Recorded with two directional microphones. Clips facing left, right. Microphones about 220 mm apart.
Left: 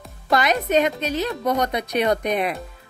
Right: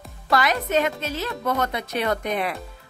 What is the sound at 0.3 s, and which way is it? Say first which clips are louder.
Speech: left 2 dB; 20° left (ahead or behind).